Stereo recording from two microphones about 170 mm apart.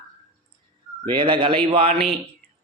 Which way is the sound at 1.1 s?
30° right (ahead or behind).